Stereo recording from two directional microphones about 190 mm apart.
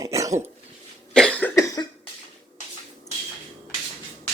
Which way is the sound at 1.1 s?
5° left (ahead or behind).